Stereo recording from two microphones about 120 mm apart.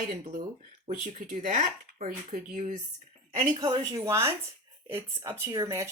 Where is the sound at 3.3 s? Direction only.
50° right (ahead or behind).